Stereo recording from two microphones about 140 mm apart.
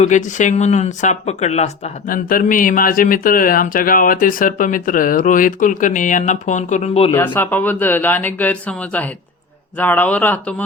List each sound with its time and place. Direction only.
0.0 s speech: 60° left (ahead or behind)
2.0 s speech: 80° left; by 7.1 s 50° left (ahead or behind)
7.1 s speech: 15° left (ahead or behind)